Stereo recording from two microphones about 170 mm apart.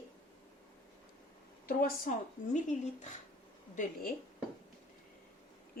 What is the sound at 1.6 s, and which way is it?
Speech, 55° left (ahead or behind).